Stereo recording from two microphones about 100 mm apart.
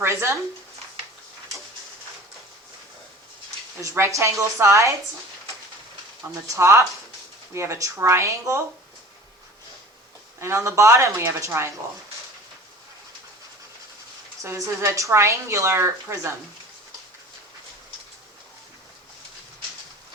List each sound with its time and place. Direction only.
0.0 s speech: 25° right (ahead or behind)
3.8 s a woman's voice: 30° right (ahead or behind)
6.3 s a woman's voice: 30° right (ahead or behind)
10.4 s a woman's voice: 30° right (ahead or behind)
14.4 s a woman's voice: 25° right (ahead or behind)